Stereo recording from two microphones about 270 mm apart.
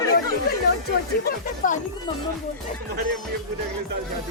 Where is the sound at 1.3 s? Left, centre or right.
Left.